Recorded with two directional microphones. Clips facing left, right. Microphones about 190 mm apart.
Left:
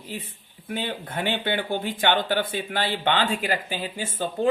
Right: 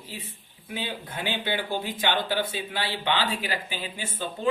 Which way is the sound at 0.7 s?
55° left (ahead or behind).